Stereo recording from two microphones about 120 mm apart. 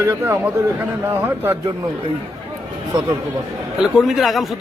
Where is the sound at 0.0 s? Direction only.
20° right (ahead or behind).